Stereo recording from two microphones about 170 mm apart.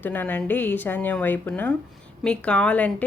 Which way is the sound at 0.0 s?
10° left (ahead or behind).